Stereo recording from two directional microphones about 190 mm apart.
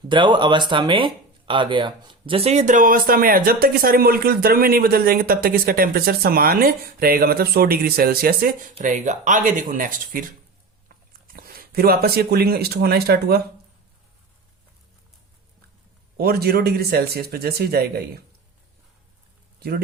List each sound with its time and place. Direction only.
0.1 s speech: 25° right (ahead or behind); by 10.2 s 45° right (ahead or behind)
11.3 s speech: 50° right (ahead or behind)
16.1 s speech: 55° right (ahead or behind)
19.5 s a sound: 55° right (ahead or behind)